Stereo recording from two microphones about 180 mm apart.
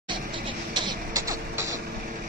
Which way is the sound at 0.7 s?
20° right (ahead or behind).